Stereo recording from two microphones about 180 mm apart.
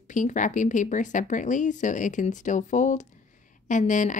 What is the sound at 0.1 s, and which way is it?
A woman's voice, 45° left (ahead or behind).